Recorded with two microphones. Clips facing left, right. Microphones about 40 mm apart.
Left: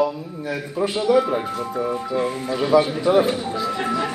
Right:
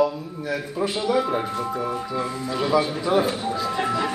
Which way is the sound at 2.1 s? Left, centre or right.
Left.